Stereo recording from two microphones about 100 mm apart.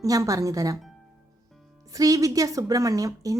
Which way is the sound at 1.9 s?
35° right (ahead or behind).